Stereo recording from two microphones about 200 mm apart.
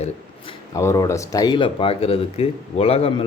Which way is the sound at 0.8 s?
15° left (ahead or behind).